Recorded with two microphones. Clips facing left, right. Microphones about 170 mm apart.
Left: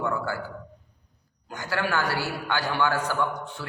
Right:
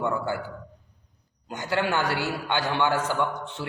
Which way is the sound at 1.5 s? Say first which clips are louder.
Right 2 dB; 20° right (ahead or behind).